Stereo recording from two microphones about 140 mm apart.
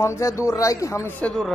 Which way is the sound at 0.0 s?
20° left (ahead or behind).